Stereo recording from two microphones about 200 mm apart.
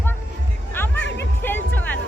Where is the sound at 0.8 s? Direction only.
10° left (ahead or behind).